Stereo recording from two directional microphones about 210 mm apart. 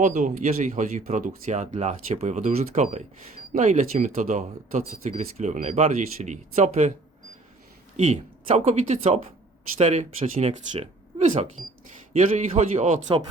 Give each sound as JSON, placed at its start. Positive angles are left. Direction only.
{"t": 0.0, "sound": "speech", "side_deg": -35}
{"t": 8.1, "sound": "speech", "side_deg": -30}
{"t": 12.5, "sound": "speech", "side_deg": -30}